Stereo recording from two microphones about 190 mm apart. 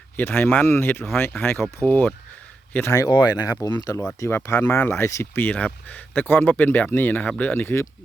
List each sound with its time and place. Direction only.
0.2 s speech: 10° left (ahead or behind)